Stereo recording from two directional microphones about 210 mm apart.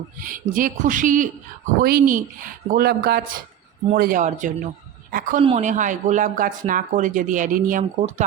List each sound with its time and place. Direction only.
0.2 s speech: 40° right (ahead or behind)